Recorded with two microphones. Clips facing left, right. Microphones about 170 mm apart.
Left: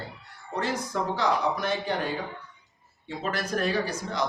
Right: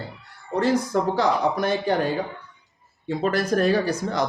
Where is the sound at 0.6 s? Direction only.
40° right (ahead or behind).